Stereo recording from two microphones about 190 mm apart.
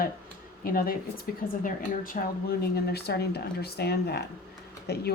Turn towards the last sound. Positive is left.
turn(degrees=55)  # may be behind; listen again after turning